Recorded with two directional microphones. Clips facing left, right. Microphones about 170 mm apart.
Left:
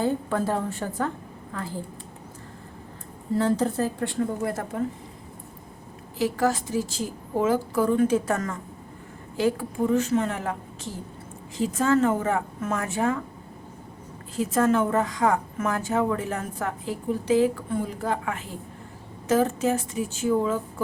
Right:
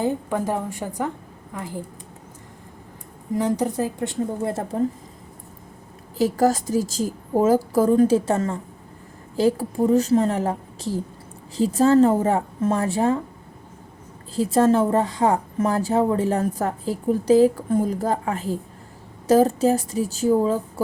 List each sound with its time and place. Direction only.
0.0 s a woman's voice: 15° right (ahead or behind)
3.3 s a woman's voice: 15° right (ahead or behind); by 4.9 s 30° right (ahead or behind)
6.1 s a woman's voice: 40° right (ahead or behind)
14.3 s a woman's voice: 30° right (ahead or behind)